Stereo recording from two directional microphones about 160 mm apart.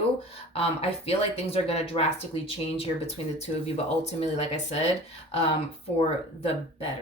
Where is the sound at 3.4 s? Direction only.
40° left (ahead or behind).